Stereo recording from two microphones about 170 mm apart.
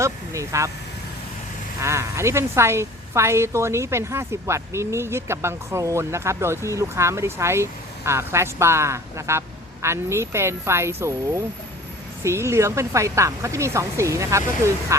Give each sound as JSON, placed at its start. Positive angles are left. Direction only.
{"t": 0.0, "sound": "speech", "side_deg": -20}
{"t": 1.8, "sound": "speech", "side_deg": -15}